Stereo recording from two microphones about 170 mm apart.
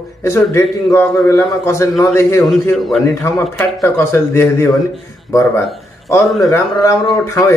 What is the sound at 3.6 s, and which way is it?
Speech, 15° left (ahead or behind).